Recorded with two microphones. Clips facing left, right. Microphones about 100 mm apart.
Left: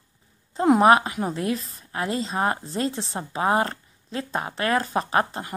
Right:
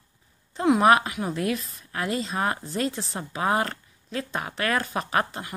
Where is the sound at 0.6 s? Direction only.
30° left (ahead or behind).